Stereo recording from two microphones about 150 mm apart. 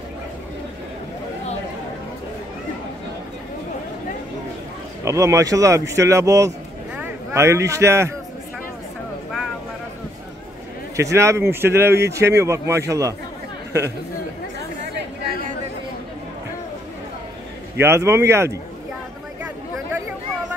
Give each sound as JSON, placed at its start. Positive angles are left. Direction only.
{"t": 5.0, "sound": "a man's voice", "side_deg": -20}
{"t": 11.0, "sound": "speech", "side_deg": -20}
{"t": 17.7, "sound": "a man's voice", "side_deg": -15}